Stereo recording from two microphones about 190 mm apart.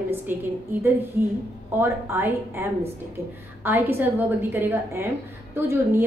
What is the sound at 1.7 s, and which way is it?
Speech, 10° right (ahead or behind).